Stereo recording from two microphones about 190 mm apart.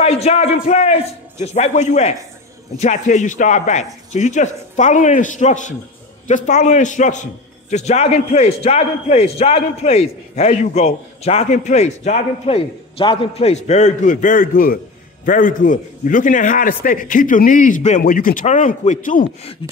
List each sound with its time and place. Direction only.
0.0 s a man's voice: 35° left (ahead or behind)